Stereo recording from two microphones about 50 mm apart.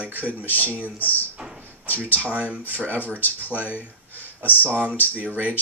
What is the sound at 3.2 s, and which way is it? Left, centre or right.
Speech, left.